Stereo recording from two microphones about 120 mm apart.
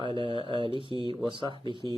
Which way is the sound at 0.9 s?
45° left (ahead or behind).